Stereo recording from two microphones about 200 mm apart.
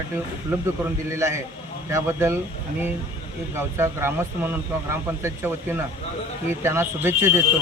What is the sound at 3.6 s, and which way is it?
Speech, 10° right (ahead or behind).